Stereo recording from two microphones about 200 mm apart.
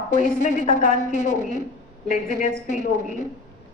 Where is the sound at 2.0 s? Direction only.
40° left (ahead or behind).